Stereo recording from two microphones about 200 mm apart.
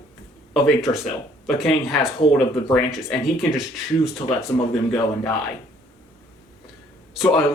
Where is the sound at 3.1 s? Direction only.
15° left (ahead or behind).